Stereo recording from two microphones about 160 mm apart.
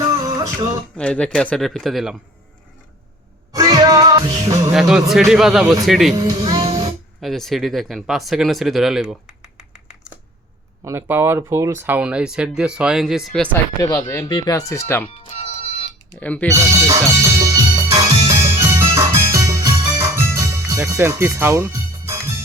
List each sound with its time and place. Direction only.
0.0 s music: 20° right (ahead or behind)
0.9 s speech: 5° left (ahead or behind)
3.5 s music: 25° right (ahead or behind)
4.7 s speech: centre (ahead or behind)
6.1 s a child's voice: 25° right (ahead or behind)
6.4 s music: 25° right (ahead or behind)
7.2 s speech: centre (ahead or behind)
10.8 s speech: 15° right (ahead or behind); by 13.6 s 5° left (ahead or behind)
13.9 s speech: 20° left (ahead or behind)
15.4 s music: 45° left (ahead or behind)
16.2 s speech: 10° left (ahead or behind)
16.5 s music: 15° right (ahead or behind)